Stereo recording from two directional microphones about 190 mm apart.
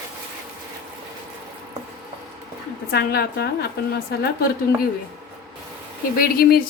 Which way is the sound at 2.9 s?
60° left (ahead or behind).